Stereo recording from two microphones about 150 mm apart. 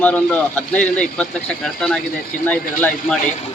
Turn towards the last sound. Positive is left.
turn(degrees=10)  # may be behind; listen again after turning